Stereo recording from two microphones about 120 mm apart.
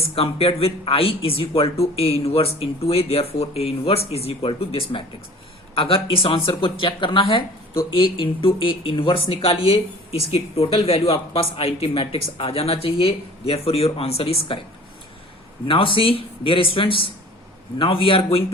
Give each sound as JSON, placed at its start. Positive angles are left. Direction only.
{"t": 0.1, "sound": "speech", "side_deg": 55}
{"t": 15.6, "sound": "speech", "side_deg": 45}